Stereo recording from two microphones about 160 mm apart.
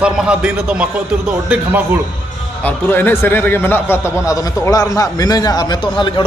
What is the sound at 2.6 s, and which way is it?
A man's voice, 10° left (ahead or behind).